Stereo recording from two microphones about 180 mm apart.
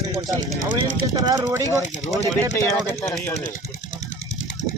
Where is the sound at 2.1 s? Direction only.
15° left (ahead or behind).